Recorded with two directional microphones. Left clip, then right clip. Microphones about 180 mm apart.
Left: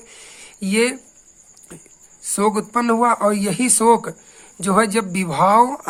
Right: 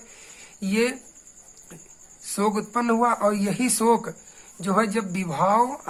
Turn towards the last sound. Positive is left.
turn(degrees=30)  # may be behind; listen again after turning